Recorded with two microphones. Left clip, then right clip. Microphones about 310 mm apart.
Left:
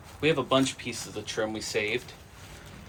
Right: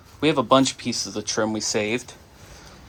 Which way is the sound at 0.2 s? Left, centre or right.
Centre.